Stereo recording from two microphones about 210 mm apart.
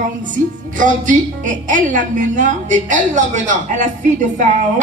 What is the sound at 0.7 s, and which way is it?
A woman's voice, 40° right (ahead or behind).